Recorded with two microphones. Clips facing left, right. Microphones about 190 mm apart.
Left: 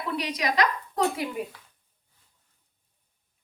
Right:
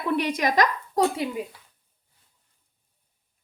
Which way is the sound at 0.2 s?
50° right (ahead or behind).